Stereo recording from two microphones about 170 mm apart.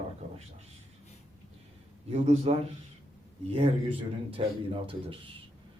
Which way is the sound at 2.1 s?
40° right (ahead or behind).